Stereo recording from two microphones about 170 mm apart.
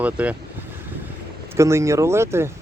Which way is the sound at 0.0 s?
10° right (ahead or behind).